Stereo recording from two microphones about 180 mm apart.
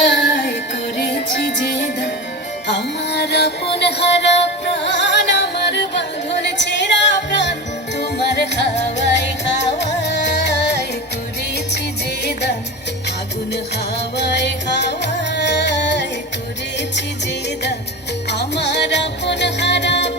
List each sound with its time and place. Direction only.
0.0 s music: 80° left
8.7 s music: 75° left (ahead or behind)
12.2 s music: 70° left (ahead or behind)
14.2 s music: 70° left (ahead or behind)
18.3 s music: 70° left (ahead or behind)